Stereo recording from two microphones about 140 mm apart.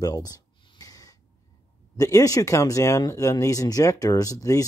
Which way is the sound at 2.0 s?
25° left (ahead or behind).